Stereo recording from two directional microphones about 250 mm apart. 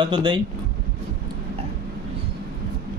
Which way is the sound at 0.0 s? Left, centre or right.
Centre.